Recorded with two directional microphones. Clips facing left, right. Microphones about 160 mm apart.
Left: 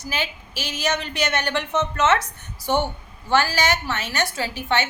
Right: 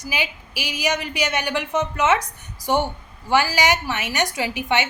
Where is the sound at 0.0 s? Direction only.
10° right (ahead or behind).